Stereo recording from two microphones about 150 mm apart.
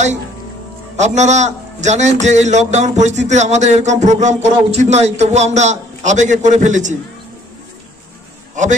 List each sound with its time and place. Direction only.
0.9 s a man's voice: 50° right (ahead or behind)